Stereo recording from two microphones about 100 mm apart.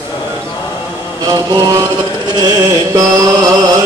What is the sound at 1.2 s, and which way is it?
Mantra, 40° right (ahead or behind).